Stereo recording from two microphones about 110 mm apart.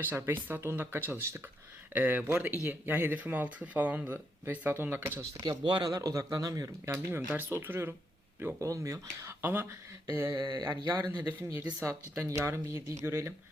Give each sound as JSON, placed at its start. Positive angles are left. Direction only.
{"t": 0.0, "sound": "speech", "side_deg": -20}
{"t": 5.4, "sound": "speech", "side_deg": -40}
{"t": 6.9, "sound": "speech", "side_deg": -15}
{"t": 9.4, "sound": "speech", "side_deg": -20}
{"t": 10.3, "sound": "speech", "side_deg": -40}
{"t": 11.2, "sound": "speech", "side_deg": -15}